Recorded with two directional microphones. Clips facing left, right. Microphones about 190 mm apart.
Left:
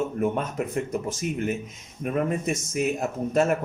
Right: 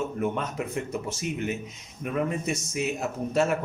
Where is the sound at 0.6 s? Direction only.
50° left (ahead or behind).